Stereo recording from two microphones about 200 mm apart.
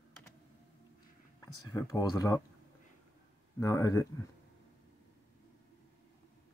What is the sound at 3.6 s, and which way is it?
Speech, 15° left (ahead or behind).